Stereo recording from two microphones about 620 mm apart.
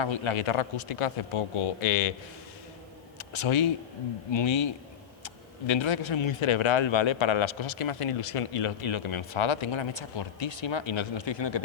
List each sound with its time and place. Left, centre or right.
0.0 s speech: left
3.2 s a man's voice: left